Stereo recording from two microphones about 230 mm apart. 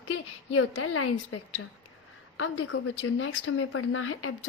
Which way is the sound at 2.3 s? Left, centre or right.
Left.